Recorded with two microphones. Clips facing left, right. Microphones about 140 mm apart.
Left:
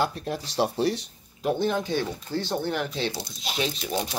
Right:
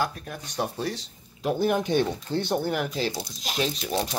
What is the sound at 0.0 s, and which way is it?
Speech, 25° left (ahead or behind).